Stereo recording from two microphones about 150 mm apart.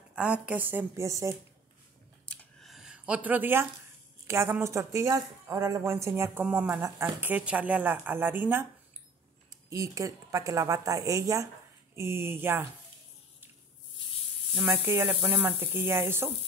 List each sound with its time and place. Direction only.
0.1 s speech: 5° right (ahead or behind)
2.2 s a sound: centre (ahead or behind)
4.3 s a woman's voice: 15° right (ahead or behind)
9.7 s a woman's voice: 20° right (ahead or behind)
14.6 s speech: 10° right (ahead or behind)